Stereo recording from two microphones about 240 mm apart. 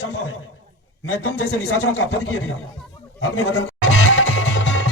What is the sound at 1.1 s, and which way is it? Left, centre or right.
Speech, left.